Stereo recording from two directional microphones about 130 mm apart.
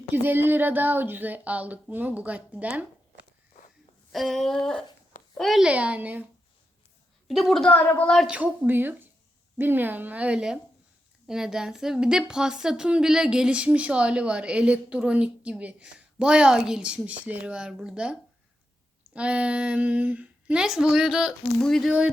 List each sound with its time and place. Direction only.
0.1 s a woman's voice: 15° right (ahead or behind)
4.1 s a sound: centre (ahead or behind)
5.4 s a woman's voice: centre (ahead or behind)
7.3 s a sound: centre (ahead or behind)
7.7 s a woman's voice: 15° left (ahead or behind)
8.3 s a woman's voice: 15° right (ahead or behind)